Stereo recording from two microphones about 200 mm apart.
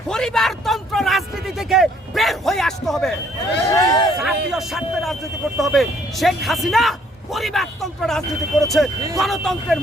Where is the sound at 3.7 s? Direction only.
20° left (ahead or behind).